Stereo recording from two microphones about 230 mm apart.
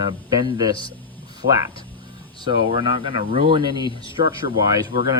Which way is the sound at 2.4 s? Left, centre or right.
Right.